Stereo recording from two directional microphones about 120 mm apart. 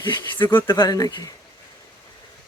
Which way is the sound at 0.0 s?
35° left (ahead or behind).